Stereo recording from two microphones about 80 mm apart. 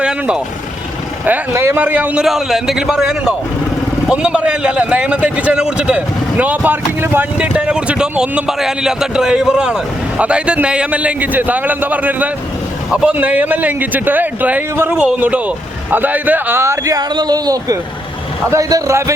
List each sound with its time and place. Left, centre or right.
0.0 s vehicle: centre
1.5 s a man's voice: right
2.2 s a man's voice: centre; by 7.3 s right
7.5 s a man's voice: centre; by 17.0 s right
17.0 s speech: right
18.5 s a man's voice: right